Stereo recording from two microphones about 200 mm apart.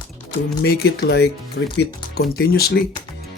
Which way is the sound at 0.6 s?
55° left (ahead or behind).